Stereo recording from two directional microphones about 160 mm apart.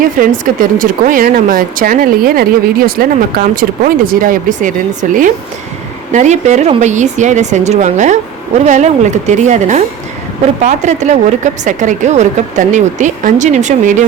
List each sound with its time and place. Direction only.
0.2 s speech: 55° right (ahead or behind)